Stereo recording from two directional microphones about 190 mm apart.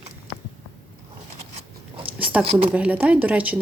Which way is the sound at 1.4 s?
30° right (ahead or behind).